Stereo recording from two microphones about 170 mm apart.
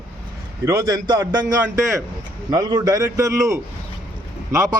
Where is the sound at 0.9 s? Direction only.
25° right (ahead or behind).